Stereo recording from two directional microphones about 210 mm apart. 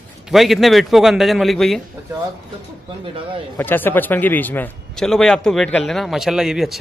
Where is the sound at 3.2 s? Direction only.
25° right (ahead or behind).